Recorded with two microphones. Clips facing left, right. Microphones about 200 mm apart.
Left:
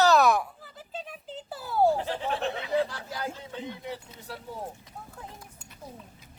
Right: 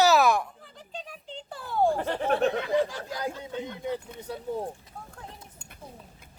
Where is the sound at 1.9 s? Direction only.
60° right (ahead or behind).